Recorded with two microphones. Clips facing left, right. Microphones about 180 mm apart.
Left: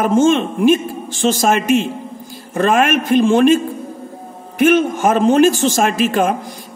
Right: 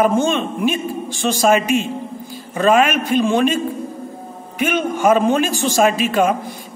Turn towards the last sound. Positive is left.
turn(degrees=45)  # may be behind; listen again after turning